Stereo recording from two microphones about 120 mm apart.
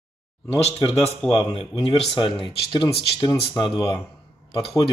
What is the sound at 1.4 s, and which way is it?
Speech, 50° left (ahead or behind).